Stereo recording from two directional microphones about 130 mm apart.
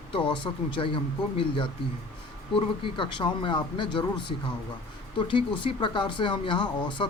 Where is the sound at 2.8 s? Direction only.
40° left (ahead or behind).